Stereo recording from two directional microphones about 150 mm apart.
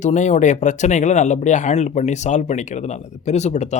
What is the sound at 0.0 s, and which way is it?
Speech, 55° left (ahead or behind).